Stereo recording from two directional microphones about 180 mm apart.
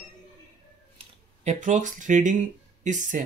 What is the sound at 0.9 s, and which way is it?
Speech, 40° right (ahead or behind).